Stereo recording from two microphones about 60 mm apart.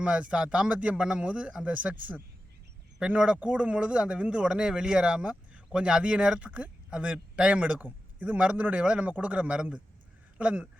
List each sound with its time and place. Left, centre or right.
0.0 s speech: centre